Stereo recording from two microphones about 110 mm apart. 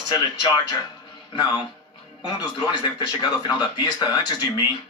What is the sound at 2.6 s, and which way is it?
Speech, 35° left (ahead or behind).